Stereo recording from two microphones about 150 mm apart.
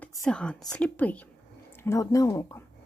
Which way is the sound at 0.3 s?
5° left (ahead or behind).